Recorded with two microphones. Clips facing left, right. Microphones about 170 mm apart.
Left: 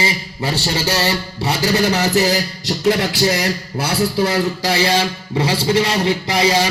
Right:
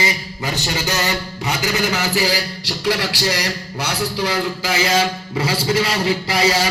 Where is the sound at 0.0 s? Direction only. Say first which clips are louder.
Left 2 dB; 30° left (ahead or behind); by 3.8 s 50° left (ahead or behind).